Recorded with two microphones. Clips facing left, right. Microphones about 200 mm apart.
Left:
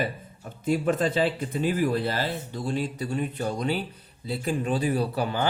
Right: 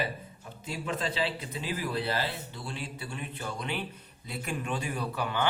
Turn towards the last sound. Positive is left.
turn(degrees=35)  # may be behind; listen again after turning